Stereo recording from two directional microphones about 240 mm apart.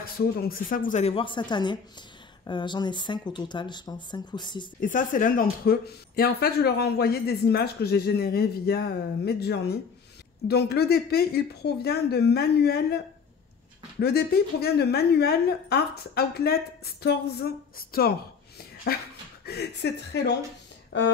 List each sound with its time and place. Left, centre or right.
0.2 s speech: left; by 4.6 s centre
4.7 s speech: left
13.9 s speech: left